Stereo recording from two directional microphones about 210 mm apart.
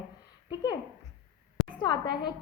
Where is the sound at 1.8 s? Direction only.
20° left (ahead or behind).